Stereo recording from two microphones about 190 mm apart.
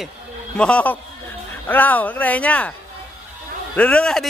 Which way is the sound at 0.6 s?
5° left (ahead or behind).